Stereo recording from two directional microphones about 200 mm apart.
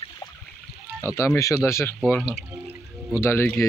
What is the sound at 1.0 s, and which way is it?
Speech, 15° left (ahead or behind).